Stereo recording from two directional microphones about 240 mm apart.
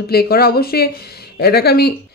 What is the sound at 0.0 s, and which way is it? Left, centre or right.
A woman's voice, left.